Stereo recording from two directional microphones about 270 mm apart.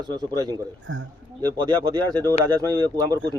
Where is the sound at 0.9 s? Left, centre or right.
Right.